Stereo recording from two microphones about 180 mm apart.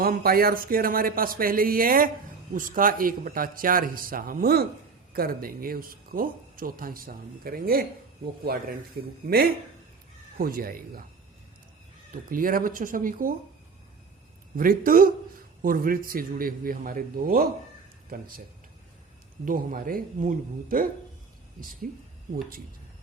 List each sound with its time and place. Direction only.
0.0 s speech: 55° right (ahead or behind)
12.1 s speech: 50° right (ahead or behind)
14.5 s speech: 50° right (ahead or behind)
19.5 s speech: 50° right (ahead or behind)